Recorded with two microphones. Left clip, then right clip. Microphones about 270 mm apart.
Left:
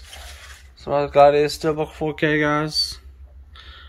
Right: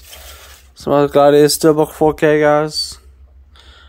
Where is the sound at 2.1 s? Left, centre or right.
Centre.